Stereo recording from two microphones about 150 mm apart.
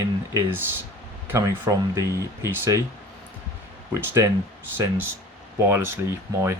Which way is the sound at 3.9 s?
20° right (ahead or behind).